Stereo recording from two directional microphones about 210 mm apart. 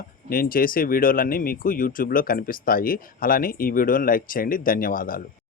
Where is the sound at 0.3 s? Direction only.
45° left (ahead or behind).